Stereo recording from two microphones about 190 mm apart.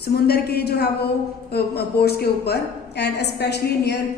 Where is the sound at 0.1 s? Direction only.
55° left (ahead or behind).